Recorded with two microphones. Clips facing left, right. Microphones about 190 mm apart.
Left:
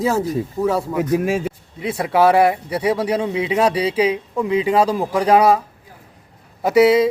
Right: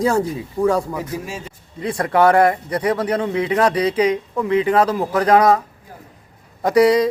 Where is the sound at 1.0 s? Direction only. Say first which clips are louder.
Left 9 dB; 60° left (ahead or behind).